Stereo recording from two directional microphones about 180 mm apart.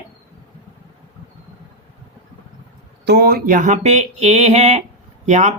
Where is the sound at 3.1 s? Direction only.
60° right (ahead or behind); by 5.5 s 40° right (ahead or behind).